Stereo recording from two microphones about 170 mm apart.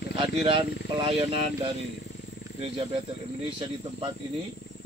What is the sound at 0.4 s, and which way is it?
Speech, 30° right (ahead or behind).